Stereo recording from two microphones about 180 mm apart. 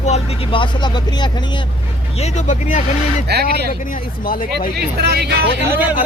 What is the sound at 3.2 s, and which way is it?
Speech, 65° right (ahead or behind).